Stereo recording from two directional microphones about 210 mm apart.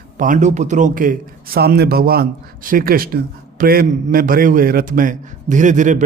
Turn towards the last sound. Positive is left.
turn(degrees=-35)  # may be behind; listen again after turning